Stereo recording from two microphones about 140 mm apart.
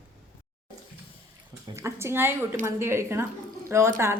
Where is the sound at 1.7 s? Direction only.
20° right (ahead or behind).